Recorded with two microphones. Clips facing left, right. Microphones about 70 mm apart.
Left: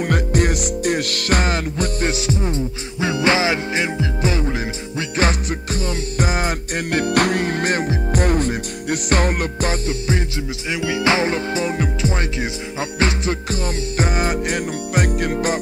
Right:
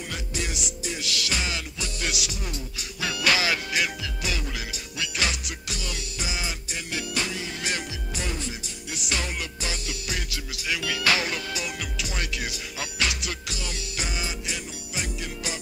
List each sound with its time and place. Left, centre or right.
0.0 s music: left